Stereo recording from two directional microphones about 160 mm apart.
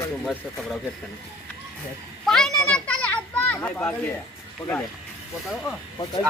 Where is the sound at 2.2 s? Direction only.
Centre (ahead or behind).